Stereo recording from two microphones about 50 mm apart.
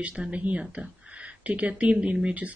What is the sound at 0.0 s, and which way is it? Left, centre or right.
Speech, right.